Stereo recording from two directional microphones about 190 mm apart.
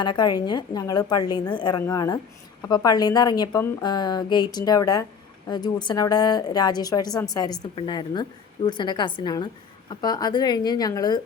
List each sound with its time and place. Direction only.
0.0 s a woman's voice: 25° left (ahead or behind)